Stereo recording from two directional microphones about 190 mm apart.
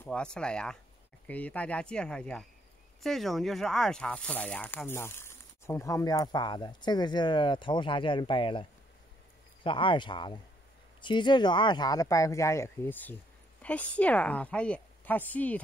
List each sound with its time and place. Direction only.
0.0 s speech: 5° left (ahead or behind)